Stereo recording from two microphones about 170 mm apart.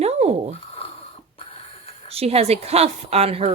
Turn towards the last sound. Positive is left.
turn(degrees=-35)  # may be behind; listen again after turning